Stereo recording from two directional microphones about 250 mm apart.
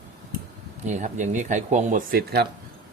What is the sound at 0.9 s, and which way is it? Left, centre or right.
Speech, right.